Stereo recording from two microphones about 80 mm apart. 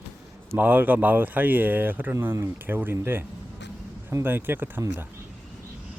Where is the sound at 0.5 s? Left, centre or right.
Right.